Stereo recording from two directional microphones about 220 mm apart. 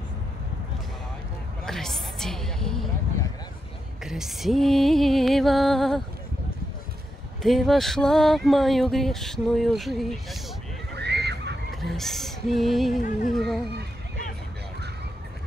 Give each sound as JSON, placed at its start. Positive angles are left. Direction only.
{"t": 1.7, "sound": "a sound", "side_deg": 0}
{"t": 4.0, "sound": "speech", "side_deg": 0}
{"t": 7.4, "sound": "speech", "side_deg": 0}
{"t": 10.9, "sound": "horse", "side_deg": -50}
{"t": 11.7, "sound": "speech", "side_deg": 0}